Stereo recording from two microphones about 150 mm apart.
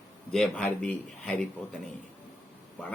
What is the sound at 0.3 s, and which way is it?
Speech, 5° left (ahead or behind).